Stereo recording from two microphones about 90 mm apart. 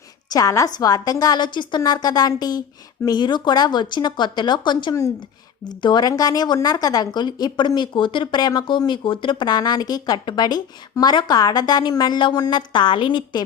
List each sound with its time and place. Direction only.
0.3 s a woman's voice: 40° left (ahead or behind); by 8.4 s 65° left (ahead or behind)
8.4 s speech: 50° left (ahead or behind)